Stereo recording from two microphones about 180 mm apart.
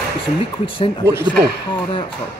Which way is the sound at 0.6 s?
30° left (ahead or behind).